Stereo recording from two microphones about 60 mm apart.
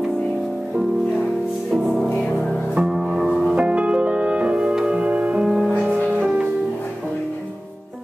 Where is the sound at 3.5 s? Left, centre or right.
Centre.